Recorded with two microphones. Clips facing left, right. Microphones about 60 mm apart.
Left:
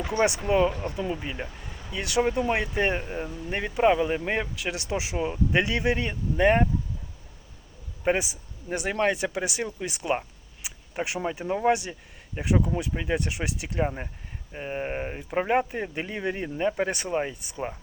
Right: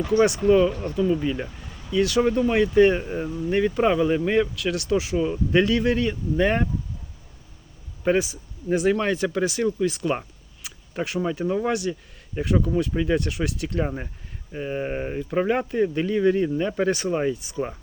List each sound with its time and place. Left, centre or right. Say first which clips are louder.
0.0 s speech: right 6 dB; left
3.0 s speech: right 5 dB; centre
8.0 s speech: right 4 dB; centre